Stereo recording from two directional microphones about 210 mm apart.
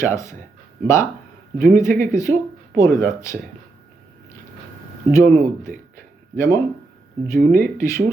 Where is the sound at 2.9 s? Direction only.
40° right (ahead or behind).